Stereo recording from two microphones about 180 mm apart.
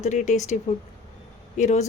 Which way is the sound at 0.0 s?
40° left (ahead or behind).